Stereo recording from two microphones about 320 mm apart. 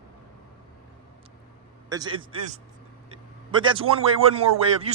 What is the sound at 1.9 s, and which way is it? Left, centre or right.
Speech, centre.